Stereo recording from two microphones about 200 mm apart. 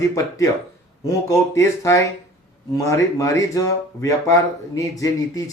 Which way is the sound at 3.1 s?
15° left (ahead or behind).